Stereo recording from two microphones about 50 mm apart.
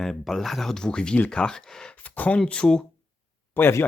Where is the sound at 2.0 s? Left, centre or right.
Left.